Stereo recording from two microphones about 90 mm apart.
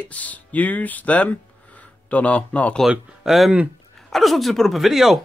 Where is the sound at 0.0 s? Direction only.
15° left (ahead or behind).